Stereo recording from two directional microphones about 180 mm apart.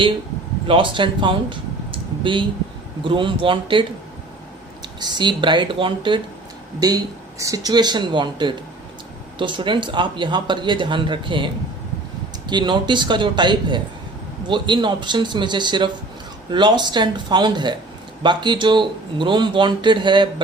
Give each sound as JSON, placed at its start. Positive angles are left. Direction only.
{"t": 0.7, "sound": "speech", "side_deg": -30}
{"t": 4.9, "sound": "speech", "side_deg": -25}